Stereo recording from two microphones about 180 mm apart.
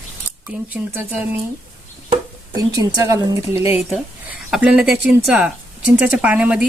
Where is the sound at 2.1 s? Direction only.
20° right (ahead or behind).